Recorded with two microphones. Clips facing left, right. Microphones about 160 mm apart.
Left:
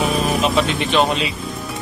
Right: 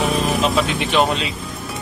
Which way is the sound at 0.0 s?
Centre (ahead or behind).